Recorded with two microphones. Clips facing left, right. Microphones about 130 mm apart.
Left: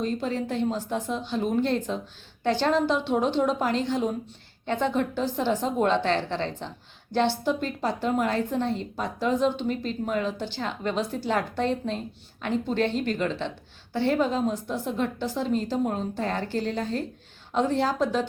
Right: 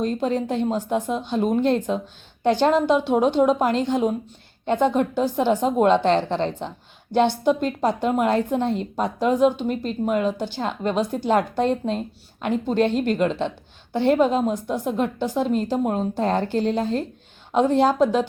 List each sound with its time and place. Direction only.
0.2 s a woman's voice: 20° right (ahead or behind)